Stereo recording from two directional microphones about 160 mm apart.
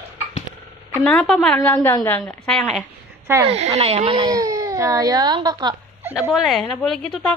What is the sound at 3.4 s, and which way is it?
Speech, 40° right (ahead or behind).